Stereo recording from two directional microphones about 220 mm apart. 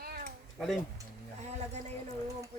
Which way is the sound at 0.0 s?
40° right (ahead or behind).